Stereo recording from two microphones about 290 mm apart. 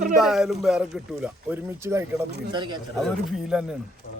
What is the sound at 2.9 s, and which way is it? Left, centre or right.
Speech, centre.